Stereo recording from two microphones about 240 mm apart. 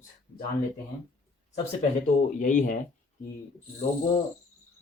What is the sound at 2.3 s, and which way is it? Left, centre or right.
Speech, left.